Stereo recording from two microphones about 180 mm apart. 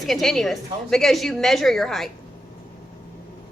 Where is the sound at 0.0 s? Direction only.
Centre (ahead or behind).